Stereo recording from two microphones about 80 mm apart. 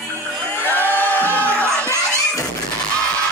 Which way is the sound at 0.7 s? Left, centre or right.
Left.